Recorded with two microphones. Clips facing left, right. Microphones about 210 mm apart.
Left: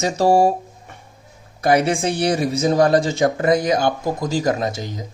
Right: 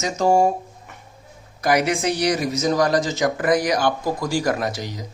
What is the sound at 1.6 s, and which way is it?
Speech, 30° left (ahead or behind).